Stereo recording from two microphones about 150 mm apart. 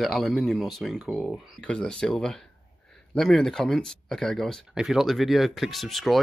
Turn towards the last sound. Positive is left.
turn(degrees=0)  # may be behind; listen again after turning